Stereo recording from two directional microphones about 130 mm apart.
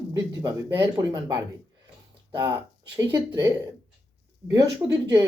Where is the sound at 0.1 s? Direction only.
30° right (ahead or behind).